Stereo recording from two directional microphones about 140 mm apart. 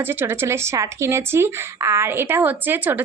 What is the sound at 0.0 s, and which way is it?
Speech, 15° right (ahead or behind).